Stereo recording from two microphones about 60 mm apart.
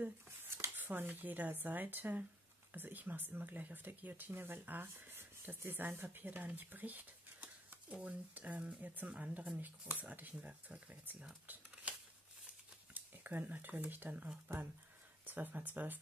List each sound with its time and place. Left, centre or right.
0.7 s speech: right
12.9 s speech: right